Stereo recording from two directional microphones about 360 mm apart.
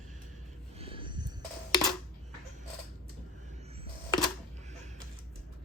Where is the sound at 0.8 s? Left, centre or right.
Centre.